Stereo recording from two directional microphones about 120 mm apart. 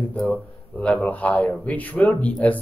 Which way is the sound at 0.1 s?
10° left (ahead or behind).